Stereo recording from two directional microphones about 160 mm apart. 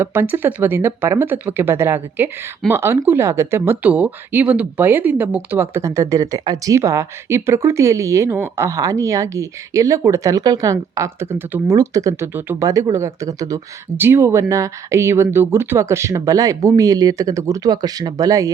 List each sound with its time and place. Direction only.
0.0 s speech: 15° right (ahead or behind)